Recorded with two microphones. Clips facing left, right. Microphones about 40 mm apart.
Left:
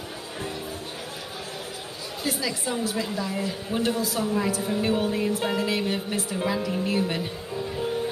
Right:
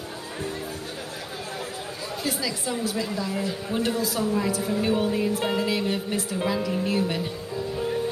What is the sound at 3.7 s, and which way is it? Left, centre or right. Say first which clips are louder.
Speech: even; centre.